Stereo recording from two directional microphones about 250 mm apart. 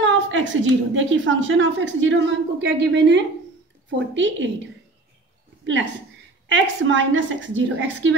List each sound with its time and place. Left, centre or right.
0.0 s a woman's voice: right
6.5 s a woman's voice: right